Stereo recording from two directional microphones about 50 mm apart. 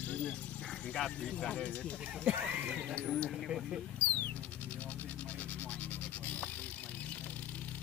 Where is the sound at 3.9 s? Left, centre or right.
Left.